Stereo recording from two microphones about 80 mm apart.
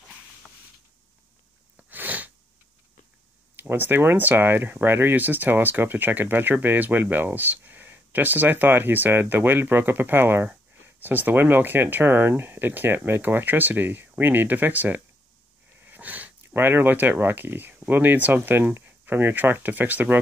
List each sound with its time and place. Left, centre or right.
1.9 s sneeze: right
3.5 s speech: right